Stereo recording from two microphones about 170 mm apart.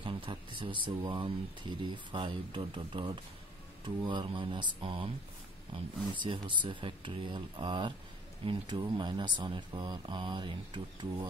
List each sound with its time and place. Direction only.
0.0 s speech: 30° right (ahead or behind)
6.1 s speech: 30° right (ahead or behind)